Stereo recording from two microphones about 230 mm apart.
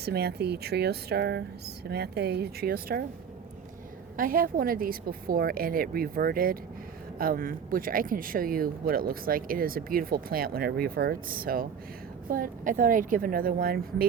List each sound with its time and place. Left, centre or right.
0.0 s speech: right
4.2 s speech: right